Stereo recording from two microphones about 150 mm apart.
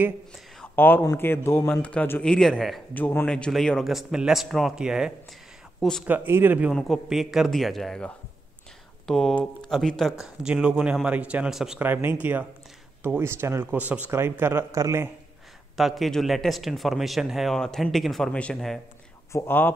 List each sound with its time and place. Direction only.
0.7 s a man's voice: 15° left (ahead or behind)
6.0 s speech: 15° right (ahead or behind)
6.7 s speech: centre (ahead or behind); by 15.0 s 20° right (ahead or behind)
15.7 s speech: centre (ahead or behind)
19.3 s a man's voice: 15° left (ahead or behind)